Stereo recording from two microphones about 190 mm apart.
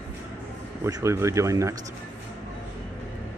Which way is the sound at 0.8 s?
15° right (ahead or behind).